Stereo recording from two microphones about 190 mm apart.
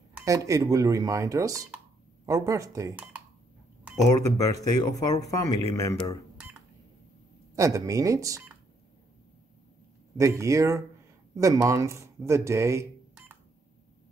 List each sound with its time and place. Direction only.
0.1 s speech: 15° right (ahead or behind)
4.4 s speech: 15° left (ahead or behind)
7.5 s speech: 15° right (ahead or behind)
10.1 s speech: 15° right (ahead or behind)